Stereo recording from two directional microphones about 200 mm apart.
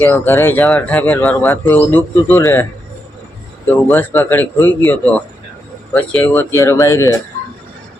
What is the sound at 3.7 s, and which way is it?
Speech, 10° left (ahead or behind).